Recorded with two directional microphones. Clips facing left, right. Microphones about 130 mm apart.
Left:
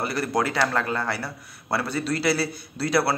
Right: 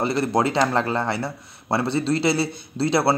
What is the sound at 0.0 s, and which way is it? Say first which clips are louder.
A man's voice: right 4 dB; 25° right (ahead or behind).